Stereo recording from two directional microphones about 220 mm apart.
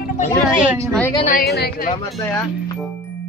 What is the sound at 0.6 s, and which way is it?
Speech, 10° right (ahead or behind).